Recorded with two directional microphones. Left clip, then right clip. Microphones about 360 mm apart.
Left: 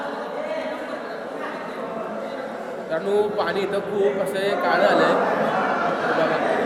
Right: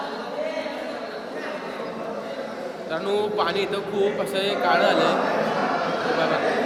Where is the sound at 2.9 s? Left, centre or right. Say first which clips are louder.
Left 3 dB; centre.